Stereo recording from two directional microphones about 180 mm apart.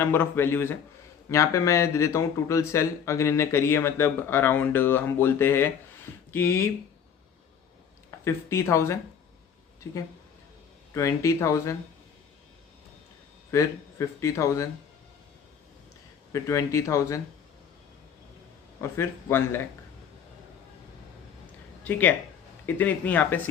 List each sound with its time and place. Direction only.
0.0 s speech: 10° left (ahead or behind)
8.2 s speech: 15° left (ahead or behind)
13.5 s speech: 15° left (ahead or behind)
16.3 s speech: 15° left (ahead or behind)
18.8 s speech: 15° left (ahead or behind)
21.8 s speech: 10° left (ahead or behind)